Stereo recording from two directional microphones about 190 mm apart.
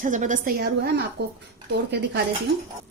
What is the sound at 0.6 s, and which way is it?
A woman's voice, 60° right (ahead or behind).